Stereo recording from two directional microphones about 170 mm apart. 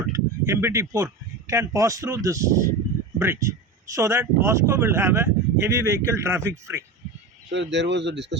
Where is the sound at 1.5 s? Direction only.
20° right (ahead or behind).